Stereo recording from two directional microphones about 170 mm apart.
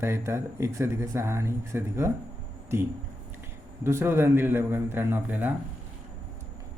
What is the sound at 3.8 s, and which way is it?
Speech, 15° right (ahead or behind).